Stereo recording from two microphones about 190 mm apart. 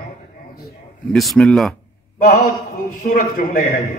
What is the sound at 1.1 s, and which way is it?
Speech, centre (ahead or behind).